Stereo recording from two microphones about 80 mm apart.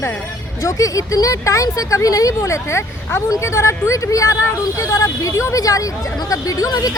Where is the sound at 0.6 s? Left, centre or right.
Left.